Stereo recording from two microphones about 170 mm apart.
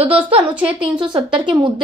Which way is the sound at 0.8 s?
30° right (ahead or behind).